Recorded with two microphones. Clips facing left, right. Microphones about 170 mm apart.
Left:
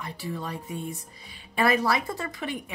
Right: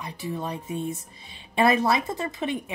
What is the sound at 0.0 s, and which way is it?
A woman's voice, 20° right (ahead or behind).